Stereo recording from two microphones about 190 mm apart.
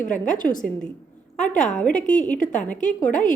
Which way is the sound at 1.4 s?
40° left (ahead or behind).